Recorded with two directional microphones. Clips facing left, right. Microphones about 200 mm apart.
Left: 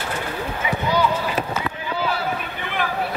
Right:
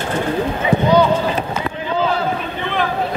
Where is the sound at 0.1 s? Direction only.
30° right (ahead or behind).